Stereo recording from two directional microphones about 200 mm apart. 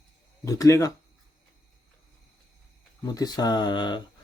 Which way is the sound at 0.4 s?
15° left (ahead or behind).